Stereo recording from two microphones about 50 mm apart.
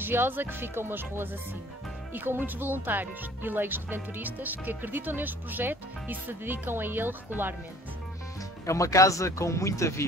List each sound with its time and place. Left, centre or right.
0.0 s speech: right
8.6 s speech: left